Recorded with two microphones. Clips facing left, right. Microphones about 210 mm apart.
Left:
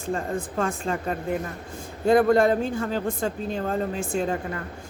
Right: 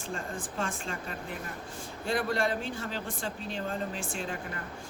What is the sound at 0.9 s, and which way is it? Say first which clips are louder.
Speech: left 10 dB; 50° left (ahead or behind).